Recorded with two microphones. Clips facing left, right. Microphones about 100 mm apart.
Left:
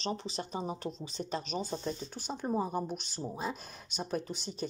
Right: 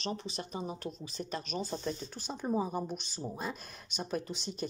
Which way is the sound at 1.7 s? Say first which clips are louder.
Even; 10° left (ahead or behind).